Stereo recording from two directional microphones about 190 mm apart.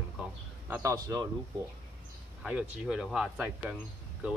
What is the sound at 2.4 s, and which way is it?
Speech, 5° right (ahead or behind).